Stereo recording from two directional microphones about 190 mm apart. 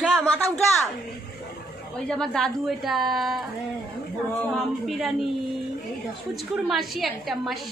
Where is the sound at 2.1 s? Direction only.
5° left (ahead or behind).